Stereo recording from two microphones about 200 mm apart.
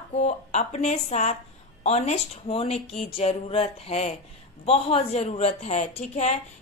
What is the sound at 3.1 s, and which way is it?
Music, 30° left (ahead or behind).